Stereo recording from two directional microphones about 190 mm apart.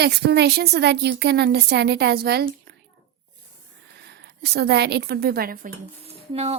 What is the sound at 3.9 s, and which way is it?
A woman's voice, 60° right (ahead or behind).